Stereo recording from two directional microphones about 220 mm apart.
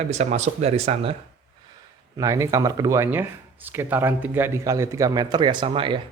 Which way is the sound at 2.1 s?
15° right (ahead or behind).